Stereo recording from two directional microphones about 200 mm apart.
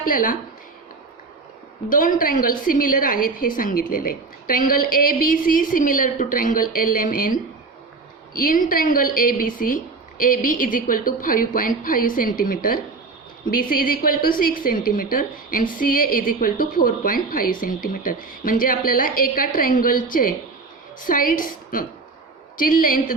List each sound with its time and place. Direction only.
0.0 s a woman's voice: 45° left (ahead or behind)
1.9 s a woman's voice: 45° left (ahead or behind)